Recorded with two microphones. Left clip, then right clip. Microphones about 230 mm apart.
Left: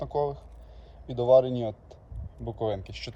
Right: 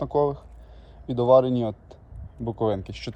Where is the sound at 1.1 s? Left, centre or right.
Centre.